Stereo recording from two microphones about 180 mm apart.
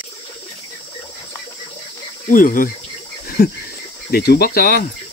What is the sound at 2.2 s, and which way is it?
Speech, 50° left (ahead or behind).